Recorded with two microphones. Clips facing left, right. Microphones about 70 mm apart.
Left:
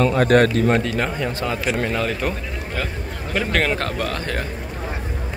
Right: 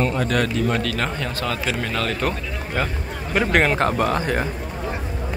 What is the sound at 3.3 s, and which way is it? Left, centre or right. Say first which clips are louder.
A man's voice: right 3 dB; centre.